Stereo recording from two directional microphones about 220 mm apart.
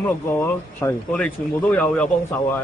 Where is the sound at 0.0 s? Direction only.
10° left (ahead or behind).